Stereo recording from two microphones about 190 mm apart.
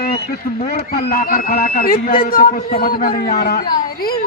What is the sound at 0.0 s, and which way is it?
Speech, 50° left (ahead or behind).